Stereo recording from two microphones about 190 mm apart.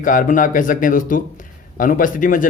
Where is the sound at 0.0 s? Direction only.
45° left (ahead or behind).